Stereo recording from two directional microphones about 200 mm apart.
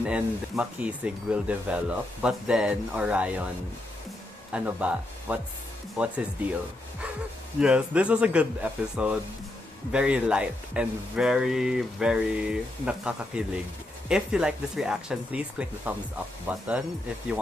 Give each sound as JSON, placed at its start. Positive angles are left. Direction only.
{"t": 0.0, "sound": "speech", "side_deg": -5}
{"t": 4.5, "sound": "speech", "side_deg": -5}
{"t": 7.6, "sound": "speech", "side_deg": -5}